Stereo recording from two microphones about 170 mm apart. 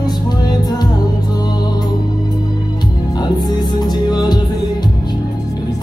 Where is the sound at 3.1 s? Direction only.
25° left (ahead or behind).